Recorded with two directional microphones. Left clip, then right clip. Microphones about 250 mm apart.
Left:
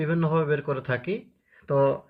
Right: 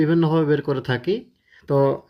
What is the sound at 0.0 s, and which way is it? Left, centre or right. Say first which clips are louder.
Speech: right 6 dB; right.